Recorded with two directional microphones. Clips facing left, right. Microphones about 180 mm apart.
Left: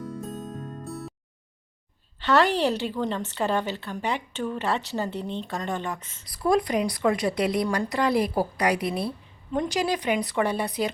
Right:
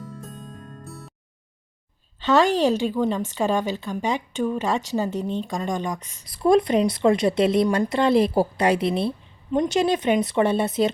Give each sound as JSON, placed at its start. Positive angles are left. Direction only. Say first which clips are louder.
{"t": 0.9, "sound": "music", "louder": "left 7 dB", "side_deg": 0}
{"t": 2.2, "sound": "a woman's voice", "louder": "right 3 dB", "side_deg": -15}